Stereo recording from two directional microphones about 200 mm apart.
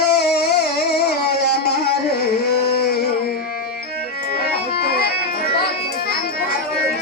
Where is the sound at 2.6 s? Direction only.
50° left (ahead or behind).